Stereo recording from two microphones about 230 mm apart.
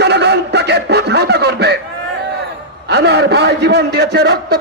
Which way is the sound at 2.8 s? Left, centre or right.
Right.